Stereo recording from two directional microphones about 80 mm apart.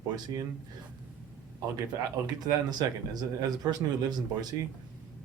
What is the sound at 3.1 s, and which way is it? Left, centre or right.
Speech, right.